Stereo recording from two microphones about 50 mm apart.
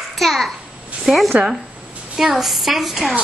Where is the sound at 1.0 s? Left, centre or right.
Centre.